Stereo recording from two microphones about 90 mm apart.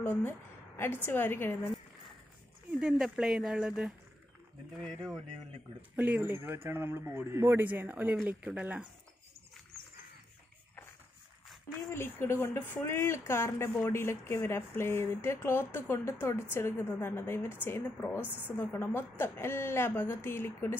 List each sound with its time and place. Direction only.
0.0 s a woman's voice: 20° left (ahead or behind)
2.8 s speech: 10° right (ahead or behind)
4.8 s speech: 5° left (ahead or behind)
5.8 s a man's voice: 20° right (ahead or behind)
11.9 s a woman's voice: 30° left (ahead or behind)